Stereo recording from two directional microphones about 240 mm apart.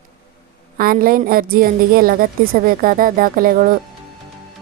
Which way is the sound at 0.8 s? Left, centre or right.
Right.